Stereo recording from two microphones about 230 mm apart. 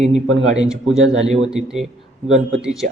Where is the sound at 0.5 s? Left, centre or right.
Centre.